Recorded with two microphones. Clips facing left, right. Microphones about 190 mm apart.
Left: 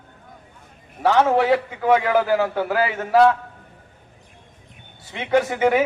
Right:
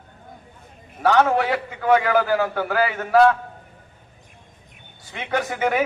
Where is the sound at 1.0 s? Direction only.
25° left (ahead or behind).